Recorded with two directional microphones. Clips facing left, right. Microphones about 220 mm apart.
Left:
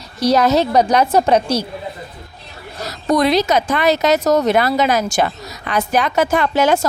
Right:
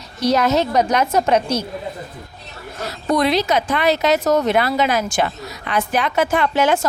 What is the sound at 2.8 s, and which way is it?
Speech, 40° left (ahead or behind).